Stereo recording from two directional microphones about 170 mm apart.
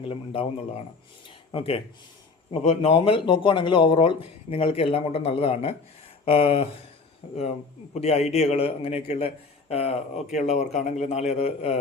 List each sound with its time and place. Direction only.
1.5 s speech: 35° left (ahead or behind)
7.9 s speech: 40° left (ahead or behind)